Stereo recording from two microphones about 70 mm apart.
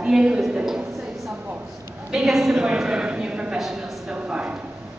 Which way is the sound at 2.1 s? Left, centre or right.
Centre.